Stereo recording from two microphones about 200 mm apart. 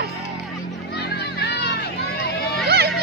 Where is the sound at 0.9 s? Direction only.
55° left (ahead or behind).